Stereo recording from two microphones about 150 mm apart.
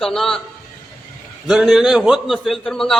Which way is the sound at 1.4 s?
Centre (ahead or behind).